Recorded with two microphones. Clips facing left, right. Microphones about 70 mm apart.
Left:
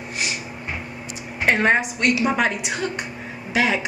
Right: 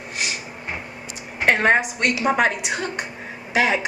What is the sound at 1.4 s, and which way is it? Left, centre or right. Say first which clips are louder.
A woman's voice: right 1 dB; right.